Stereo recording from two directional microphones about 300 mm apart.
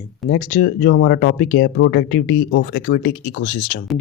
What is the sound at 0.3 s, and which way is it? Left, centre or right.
Speech, left.